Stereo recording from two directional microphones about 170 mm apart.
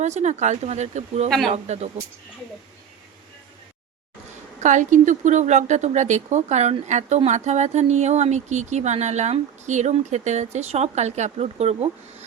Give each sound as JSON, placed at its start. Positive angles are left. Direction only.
{"t": 0.0, "sound": "speech", "side_deg": -40}
{"t": 4.6, "sound": "speech", "side_deg": -45}